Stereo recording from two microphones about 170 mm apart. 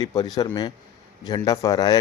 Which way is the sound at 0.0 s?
20° left (ahead or behind).